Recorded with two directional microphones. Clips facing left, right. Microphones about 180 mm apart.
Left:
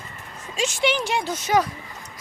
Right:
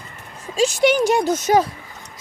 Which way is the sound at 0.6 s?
40° right (ahead or behind).